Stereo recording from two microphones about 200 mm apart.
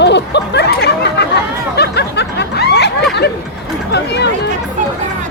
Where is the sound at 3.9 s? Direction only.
55° left (ahead or behind).